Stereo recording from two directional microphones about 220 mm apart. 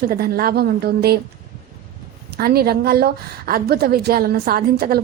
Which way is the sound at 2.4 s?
45° right (ahead or behind).